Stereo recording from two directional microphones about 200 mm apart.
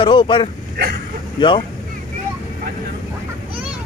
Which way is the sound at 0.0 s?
25° left (ahead or behind).